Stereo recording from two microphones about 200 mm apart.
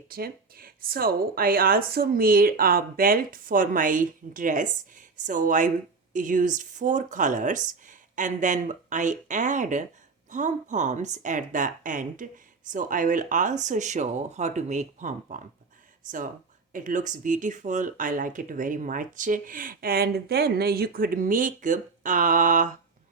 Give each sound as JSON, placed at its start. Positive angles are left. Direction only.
{"t": 0.1, "sound": "speech", "side_deg": -45}